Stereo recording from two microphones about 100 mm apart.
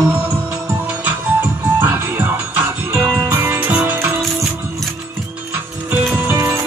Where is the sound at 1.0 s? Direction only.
20° right (ahead or behind).